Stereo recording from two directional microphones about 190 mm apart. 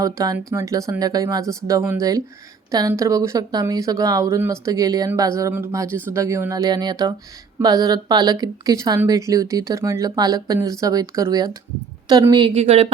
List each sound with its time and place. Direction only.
0.0 s speech: 15° right (ahead or behind)
12.5 s speech: 30° right (ahead or behind)